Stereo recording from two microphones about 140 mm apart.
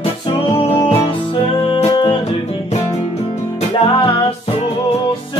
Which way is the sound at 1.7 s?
35° left (ahead or behind).